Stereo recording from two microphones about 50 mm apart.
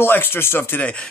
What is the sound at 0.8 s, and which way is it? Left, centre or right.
Speech, left.